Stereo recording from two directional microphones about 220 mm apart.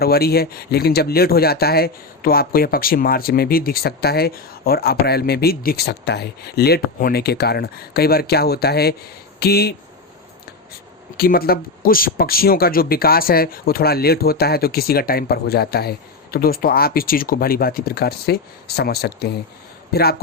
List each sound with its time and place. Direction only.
0.0 s speech: 45° left (ahead or behind)
11.2 s speech: 45° left (ahead or behind)